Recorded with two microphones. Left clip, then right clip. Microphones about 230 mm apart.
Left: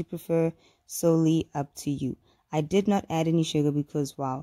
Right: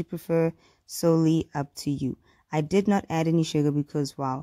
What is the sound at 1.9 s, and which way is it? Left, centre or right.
Speech, right.